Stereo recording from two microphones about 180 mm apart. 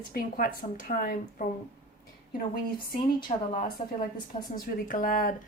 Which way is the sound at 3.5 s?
50° left (ahead or behind).